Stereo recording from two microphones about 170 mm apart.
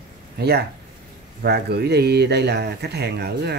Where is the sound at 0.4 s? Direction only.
70° right (ahead or behind).